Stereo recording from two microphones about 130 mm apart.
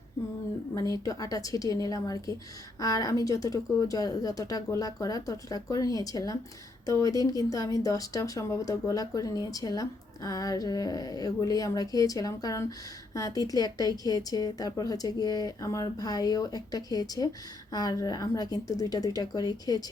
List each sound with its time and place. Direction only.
0.7 s speech: 25° left (ahead or behind)